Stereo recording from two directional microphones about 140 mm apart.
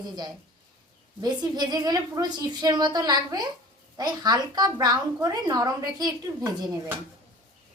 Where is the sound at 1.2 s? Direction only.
30° right (ahead or behind).